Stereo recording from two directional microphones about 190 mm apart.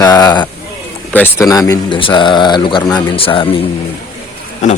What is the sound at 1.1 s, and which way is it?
Speech, 10° left (ahead or behind).